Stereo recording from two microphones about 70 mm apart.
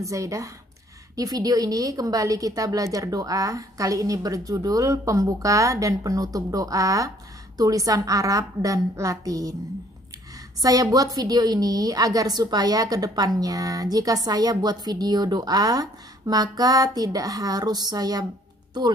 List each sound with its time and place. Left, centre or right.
0.0 s a woman's voice: right
10.6 s a woman's voice: right
18.7 s speech: right